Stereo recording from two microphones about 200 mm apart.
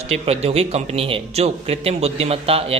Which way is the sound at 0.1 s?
30° right (ahead or behind).